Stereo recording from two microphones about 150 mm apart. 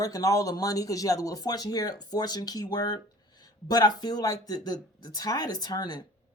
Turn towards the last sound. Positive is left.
turn(degrees=25)  # may be behind; listen again after turning